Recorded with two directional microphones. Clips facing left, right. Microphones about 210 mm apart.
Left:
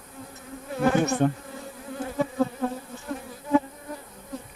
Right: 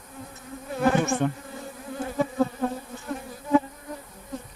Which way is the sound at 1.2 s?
40° left (ahead or behind).